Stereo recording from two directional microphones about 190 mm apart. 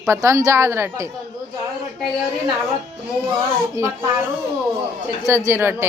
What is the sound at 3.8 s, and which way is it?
Speech, 15° right (ahead or behind).